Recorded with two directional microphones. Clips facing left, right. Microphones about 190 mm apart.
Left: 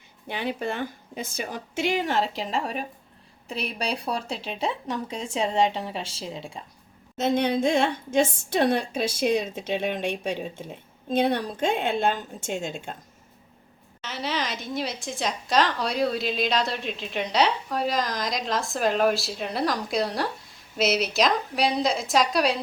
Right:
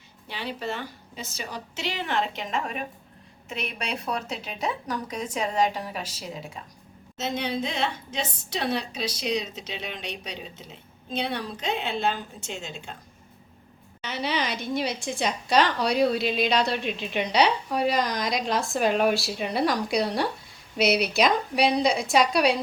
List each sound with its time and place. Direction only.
0.3 s a woman's voice: 50° left (ahead or behind); by 6.6 s 30° left (ahead or behind)
7.2 s a woman's voice: 50° left (ahead or behind)
14.0 s a woman's voice: centre (ahead or behind)